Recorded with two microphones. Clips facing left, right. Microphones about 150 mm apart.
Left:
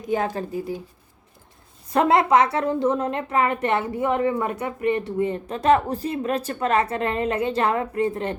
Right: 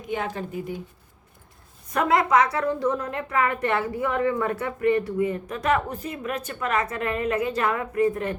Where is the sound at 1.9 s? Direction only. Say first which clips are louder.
Left 3 dB; 30° left (ahead or behind).